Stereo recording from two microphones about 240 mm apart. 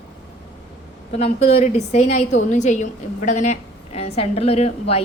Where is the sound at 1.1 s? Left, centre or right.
Left.